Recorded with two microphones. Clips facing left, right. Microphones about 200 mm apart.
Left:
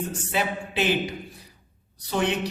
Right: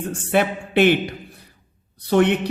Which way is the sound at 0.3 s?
60° right (ahead or behind).